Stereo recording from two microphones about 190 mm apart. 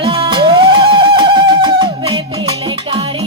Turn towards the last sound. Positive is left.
turn(degrees=-30)  # may be behind; listen again after turning